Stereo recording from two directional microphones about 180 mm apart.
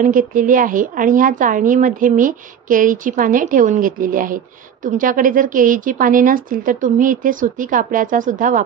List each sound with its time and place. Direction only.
0.0 s speech: 45° right (ahead or behind)